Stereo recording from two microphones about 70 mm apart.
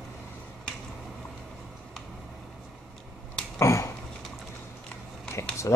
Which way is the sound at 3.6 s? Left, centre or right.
Left.